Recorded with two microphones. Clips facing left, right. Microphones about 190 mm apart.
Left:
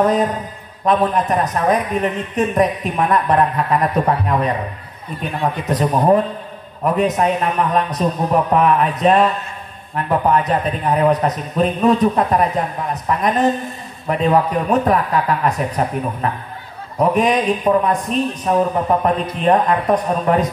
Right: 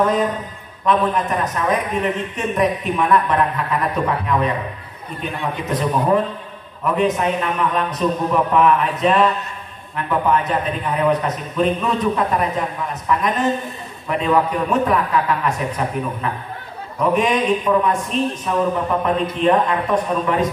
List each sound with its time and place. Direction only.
0.0 s a man's voice: 40° left (ahead or behind)